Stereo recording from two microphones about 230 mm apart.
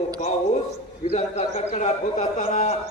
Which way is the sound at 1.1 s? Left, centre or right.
Left.